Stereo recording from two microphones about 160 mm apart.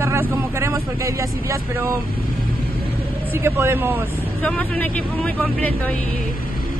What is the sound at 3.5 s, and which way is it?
Speech, 15° right (ahead or behind).